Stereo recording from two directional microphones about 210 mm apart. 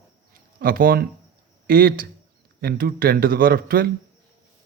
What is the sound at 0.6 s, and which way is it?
A man's voice, 45° right (ahead or behind).